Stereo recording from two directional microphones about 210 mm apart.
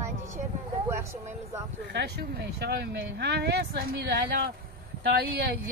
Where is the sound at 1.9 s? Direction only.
50° right (ahead or behind).